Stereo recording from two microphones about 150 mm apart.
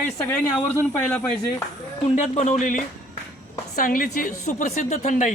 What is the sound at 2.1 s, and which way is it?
A woman's voice, 50° left (ahead or behind).